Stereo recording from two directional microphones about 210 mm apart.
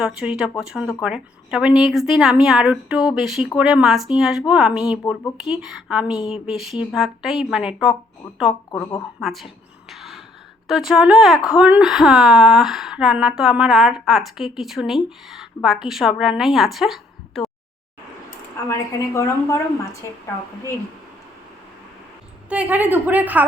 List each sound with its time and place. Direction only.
0.0 s speech: 5° right (ahead or behind)
5.0 s a woman's voice: 15° left (ahead or behind)
5.4 s speech: 5° right (ahead or behind)
9.9 s a sound: centre (ahead or behind)
10.7 s speech: centre (ahead or behind)
18.7 s a woman's voice: 15° left (ahead or behind)
22.4 s a woman's voice: 5° right (ahead or behind)